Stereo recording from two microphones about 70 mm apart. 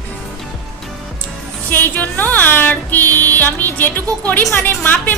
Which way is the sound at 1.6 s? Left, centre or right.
Left.